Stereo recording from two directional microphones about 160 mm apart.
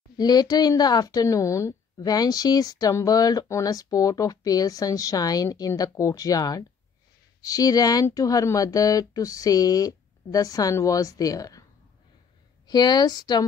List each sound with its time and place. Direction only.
0.2 s speech: 25° left (ahead or behind)
12.6 s speech: 25° left (ahead or behind)